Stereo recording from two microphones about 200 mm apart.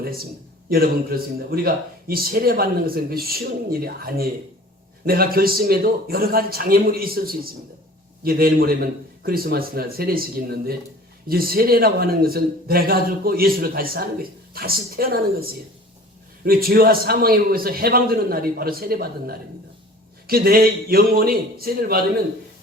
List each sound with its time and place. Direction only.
1.5 s a man's voice: 50° right (ahead or behind)
16.6 s a man's voice: 50° right (ahead or behind)
20.2 s a man's voice: 50° right (ahead or behind)